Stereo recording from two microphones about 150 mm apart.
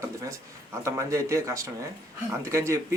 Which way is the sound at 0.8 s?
20° right (ahead or behind).